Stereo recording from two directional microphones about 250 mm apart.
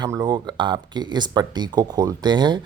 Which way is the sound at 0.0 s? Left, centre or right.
Centre.